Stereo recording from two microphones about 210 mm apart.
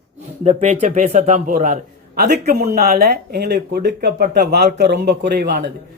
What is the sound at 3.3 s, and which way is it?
A man's voice, 50° right (ahead or behind).